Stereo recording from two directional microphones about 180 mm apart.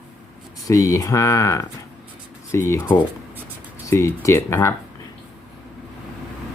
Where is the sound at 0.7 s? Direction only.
20° left (ahead or behind).